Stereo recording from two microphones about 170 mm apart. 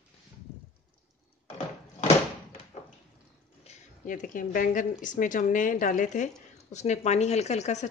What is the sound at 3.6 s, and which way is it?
Speech, 45° left (ahead or behind).